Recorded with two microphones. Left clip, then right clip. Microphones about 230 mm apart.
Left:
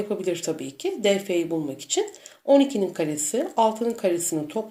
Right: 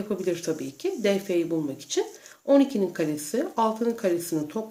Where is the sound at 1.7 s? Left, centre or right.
Right.